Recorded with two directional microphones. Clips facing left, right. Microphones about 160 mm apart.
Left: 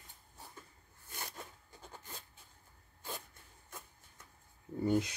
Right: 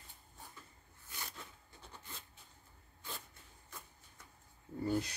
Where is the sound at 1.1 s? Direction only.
50° left (ahead or behind).